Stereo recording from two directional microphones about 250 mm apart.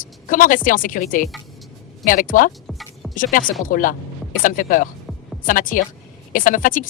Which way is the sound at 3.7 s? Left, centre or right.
Left.